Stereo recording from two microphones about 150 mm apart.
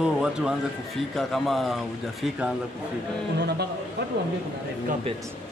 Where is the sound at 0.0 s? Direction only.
5° right (ahead or behind).